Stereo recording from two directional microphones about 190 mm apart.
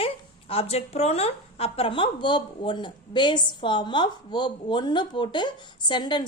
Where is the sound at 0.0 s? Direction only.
30° left (ahead or behind).